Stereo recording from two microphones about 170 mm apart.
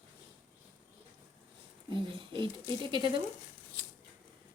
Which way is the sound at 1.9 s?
30° right (ahead or behind).